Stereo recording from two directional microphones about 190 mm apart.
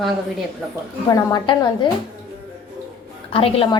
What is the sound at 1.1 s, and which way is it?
Speech, 20° left (ahead or behind).